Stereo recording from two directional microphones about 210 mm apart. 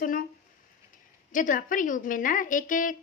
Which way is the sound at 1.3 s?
40° left (ahead or behind).